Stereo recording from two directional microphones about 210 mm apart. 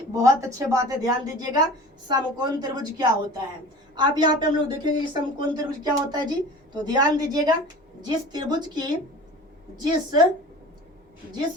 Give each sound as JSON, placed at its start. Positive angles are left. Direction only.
{"t": 0.1, "sound": "a woman's voice", "side_deg": -15}